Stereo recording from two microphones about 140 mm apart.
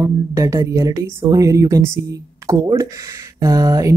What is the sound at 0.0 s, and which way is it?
Speech, 20° right (ahead or behind).